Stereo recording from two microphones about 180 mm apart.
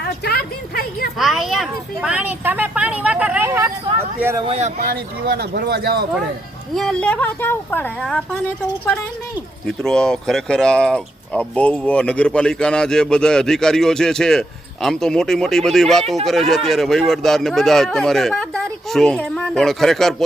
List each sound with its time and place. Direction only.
0.3 s speech: 55° left (ahead or behind)
1.2 s speech: centre (ahead or behind)
4.4 s speech: 35° right (ahead or behind)
5.2 s speech: 65° right (ahead or behind)
6.7 s a woman's voice: 5° left (ahead or behind)
9.6 s speech: 5° left (ahead or behind)